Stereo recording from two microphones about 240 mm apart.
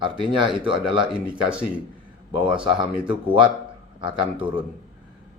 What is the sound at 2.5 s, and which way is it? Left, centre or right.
Speech, right.